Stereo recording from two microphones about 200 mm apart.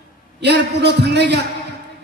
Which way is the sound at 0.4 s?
55° right (ahead or behind).